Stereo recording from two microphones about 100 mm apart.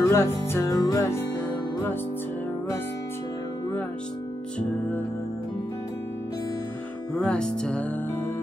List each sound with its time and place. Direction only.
0.0 s music: 25° left (ahead or behind)
4.6 s music: 20° left (ahead or behind)
7.2 s music: 10° left (ahead or behind)